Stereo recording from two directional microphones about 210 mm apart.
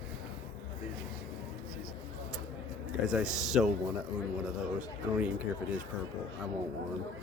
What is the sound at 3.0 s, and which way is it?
Speech, 5° right (ahead or behind).